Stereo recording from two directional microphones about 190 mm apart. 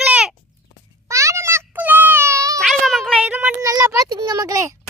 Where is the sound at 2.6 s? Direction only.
Centre (ahead or behind); by 4.8 s 20° right (ahead or behind).